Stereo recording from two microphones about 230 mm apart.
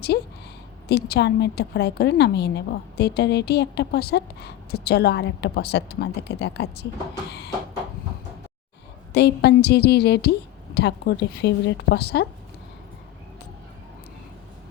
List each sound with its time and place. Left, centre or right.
0.1 s a woman's voice: left
9.1 s a woman's voice: left